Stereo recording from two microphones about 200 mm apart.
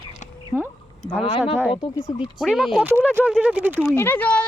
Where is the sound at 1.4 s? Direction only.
5° right (ahead or behind).